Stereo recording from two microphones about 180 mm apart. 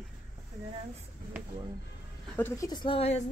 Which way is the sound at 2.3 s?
15° left (ahead or behind).